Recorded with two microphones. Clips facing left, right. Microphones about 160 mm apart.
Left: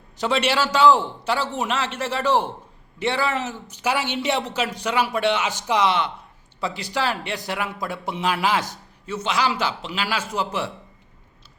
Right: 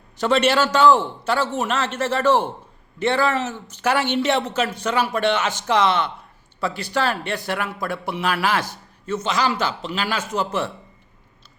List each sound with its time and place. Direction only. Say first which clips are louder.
0.2 s speech: right 4 dB; 10° left (ahead or behind)